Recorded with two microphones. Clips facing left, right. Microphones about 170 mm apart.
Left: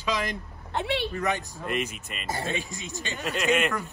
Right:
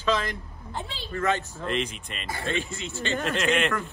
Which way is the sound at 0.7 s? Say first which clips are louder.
Left 9 dB; 70° left (ahead or behind).